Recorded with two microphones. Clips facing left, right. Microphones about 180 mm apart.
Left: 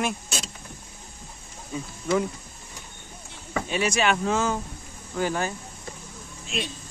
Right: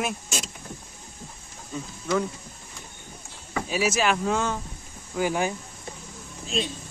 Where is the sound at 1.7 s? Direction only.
10° left (ahead or behind).